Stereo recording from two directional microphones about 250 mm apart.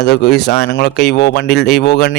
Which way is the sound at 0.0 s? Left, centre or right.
Left.